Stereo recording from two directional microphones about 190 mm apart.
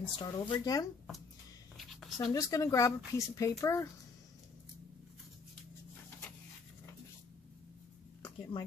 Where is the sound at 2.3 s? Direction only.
15° left (ahead or behind).